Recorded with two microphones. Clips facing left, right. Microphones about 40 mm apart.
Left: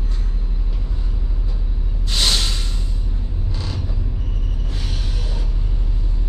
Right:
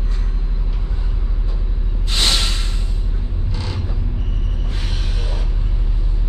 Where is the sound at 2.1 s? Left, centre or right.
Right.